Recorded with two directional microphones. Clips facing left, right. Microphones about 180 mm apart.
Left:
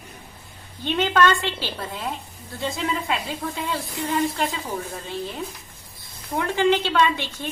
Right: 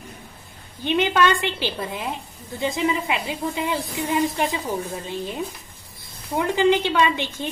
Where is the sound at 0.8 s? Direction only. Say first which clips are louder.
Right 1 dB; 15° right (ahead or behind).